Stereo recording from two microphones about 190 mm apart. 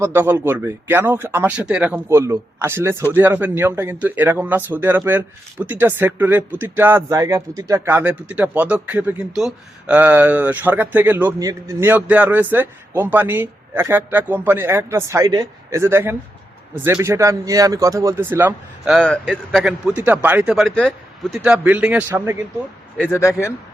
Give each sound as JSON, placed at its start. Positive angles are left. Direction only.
{"t": 0.0, "sound": "speech", "side_deg": -10}
{"t": 18.9, "sound": "speech", "side_deg": 5}
{"t": 23.0, "sound": "speech", "side_deg": 15}